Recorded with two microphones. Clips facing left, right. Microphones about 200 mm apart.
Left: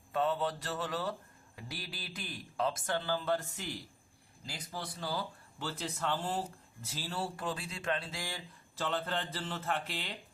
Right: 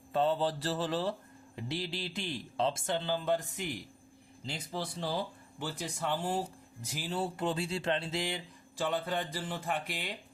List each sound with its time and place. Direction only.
0.1 s a man's voice: 30° right (ahead or behind); by 10.2 s 15° right (ahead or behind)